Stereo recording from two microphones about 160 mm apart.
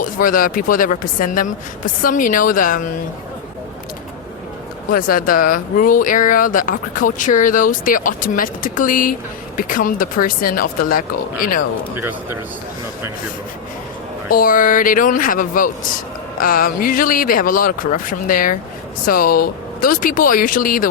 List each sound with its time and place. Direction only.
0.0 s speech: 60° left (ahead or behind)
4.9 s speech: 60° left (ahead or behind)
11.9 s speech: 15° right (ahead or behind)
14.3 s speech: 60° left (ahead or behind)